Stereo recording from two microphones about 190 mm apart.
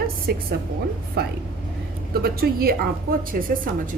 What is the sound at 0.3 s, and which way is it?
A woman's voice, 55° right (ahead or behind).